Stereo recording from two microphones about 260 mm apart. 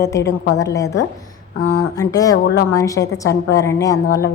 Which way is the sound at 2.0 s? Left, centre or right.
Centre.